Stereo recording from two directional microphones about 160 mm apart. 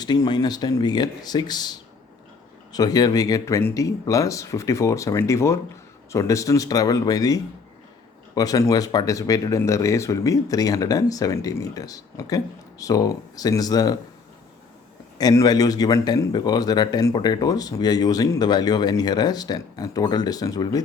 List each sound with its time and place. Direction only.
0.0 s speech: 25° left (ahead or behind)
2.7 s speech: 25° left (ahead or behind)
15.2 s speech: 25° left (ahead or behind)